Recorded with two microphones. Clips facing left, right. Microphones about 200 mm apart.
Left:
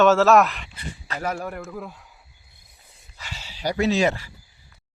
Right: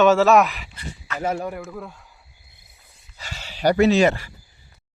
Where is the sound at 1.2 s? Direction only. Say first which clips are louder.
Right 4 dB; 25° right (ahead or behind).